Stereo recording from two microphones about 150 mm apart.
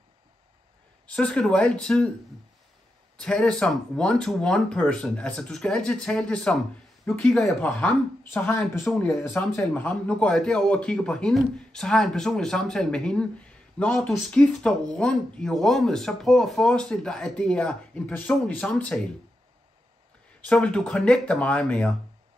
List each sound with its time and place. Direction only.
1.0 s speech: 5° left (ahead or behind)
3.2 s speech: 5° left (ahead or behind)
20.4 s speech: 10° left (ahead or behind)